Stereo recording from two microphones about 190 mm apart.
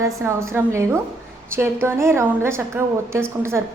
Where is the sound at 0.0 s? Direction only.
15° right (ahead or behind).